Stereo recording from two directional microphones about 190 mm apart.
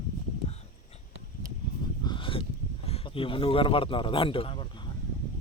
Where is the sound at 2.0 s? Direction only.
25° left (ahead or behind).